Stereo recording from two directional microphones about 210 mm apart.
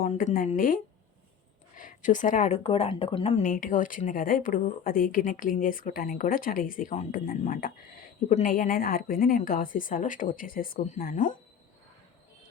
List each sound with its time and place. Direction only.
0.0 s a woman's voice: 40° left (ahead or behind)